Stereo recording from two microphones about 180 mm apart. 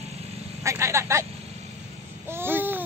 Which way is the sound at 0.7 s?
15° right (ahead or behind).